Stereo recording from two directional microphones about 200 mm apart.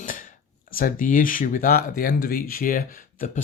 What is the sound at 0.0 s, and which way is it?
Speech, 40° left (ahead or behind).